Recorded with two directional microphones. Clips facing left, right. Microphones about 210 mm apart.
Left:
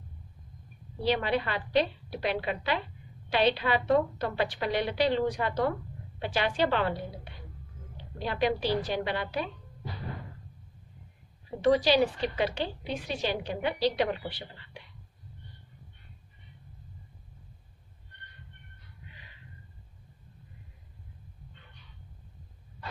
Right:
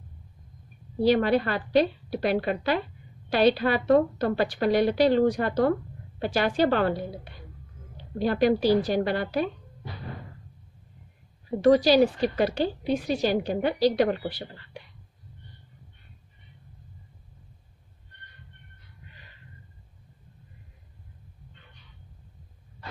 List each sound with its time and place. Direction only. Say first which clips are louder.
1.0 s a woman's voice: right 7 dB; 45° right (ahead or behind)
8.2 s a woman's voice: right 7 dB; 45° right (ahead or behind)
11.6 s a woman's voice: right 5 dB; 40° right (ahead or behind)